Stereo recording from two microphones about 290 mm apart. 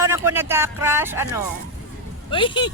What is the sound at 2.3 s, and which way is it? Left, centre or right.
Speech, centre.